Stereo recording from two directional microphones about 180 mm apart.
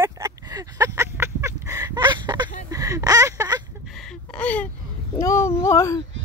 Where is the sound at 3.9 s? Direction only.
Centre (ahead or behind).